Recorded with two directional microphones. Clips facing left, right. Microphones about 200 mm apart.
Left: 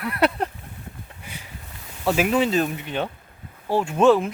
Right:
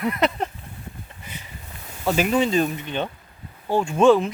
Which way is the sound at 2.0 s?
Centre (ahead or behind).